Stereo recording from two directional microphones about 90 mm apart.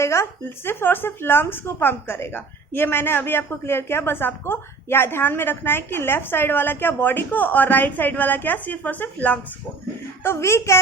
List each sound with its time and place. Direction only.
0.0 s speech: 30° left (ahead or behind)
10.2 s a woman's voice: 30° left (ahead or behind)